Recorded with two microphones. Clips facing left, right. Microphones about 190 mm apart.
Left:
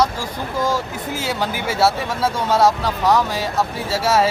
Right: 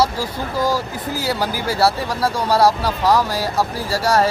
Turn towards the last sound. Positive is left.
turn(degrees=5)  # may be behind; listen again after turning